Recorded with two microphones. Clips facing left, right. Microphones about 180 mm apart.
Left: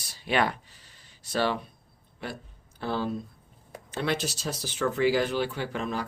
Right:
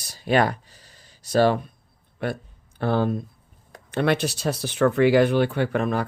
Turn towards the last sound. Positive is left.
turn(degrees=-55)  # may be behind; listen again after turning